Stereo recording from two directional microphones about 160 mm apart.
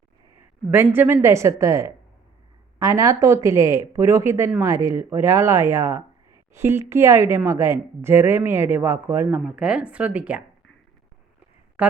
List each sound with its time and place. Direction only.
0.7 s speech: 15° right (ahead or behind)
11.8 s speech: 10° right (ahead or behind)